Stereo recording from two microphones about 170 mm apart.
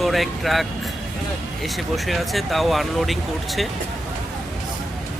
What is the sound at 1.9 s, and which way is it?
Speech, centre (ahead or behind).